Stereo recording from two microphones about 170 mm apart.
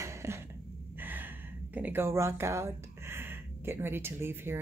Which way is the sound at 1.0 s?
10° right (ahead or behind).